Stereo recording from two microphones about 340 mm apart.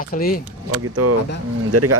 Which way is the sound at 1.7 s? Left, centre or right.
Right.